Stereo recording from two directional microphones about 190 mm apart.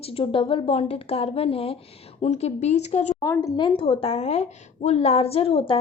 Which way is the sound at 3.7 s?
30° left (ahead or behind).